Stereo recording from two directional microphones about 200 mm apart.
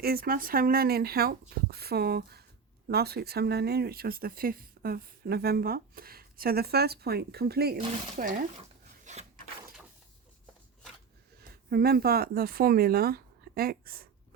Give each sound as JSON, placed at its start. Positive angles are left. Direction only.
{"t": 0.0, "sound": "speech", "side_deg": -50}
{"t": 7.8, "sound": "speech", "side_deg": -40}
{"t": 9.1, "sound": "filing", "side_deg": -35}
{"t": 11.3, "sound": "speech", "side_deg": -50}